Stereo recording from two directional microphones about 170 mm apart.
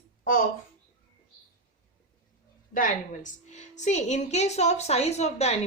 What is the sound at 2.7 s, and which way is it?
A woman's voice, 50° left (ahead or behind).